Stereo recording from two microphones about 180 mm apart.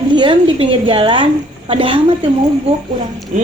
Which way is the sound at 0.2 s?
30° right (ahead or behind).